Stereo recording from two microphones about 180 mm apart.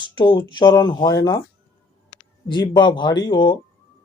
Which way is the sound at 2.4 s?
25° left (ahead or behind).